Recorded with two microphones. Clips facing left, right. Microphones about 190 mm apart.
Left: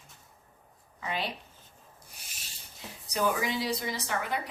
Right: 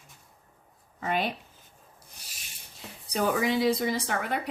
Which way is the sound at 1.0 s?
50° right (ahead or behind).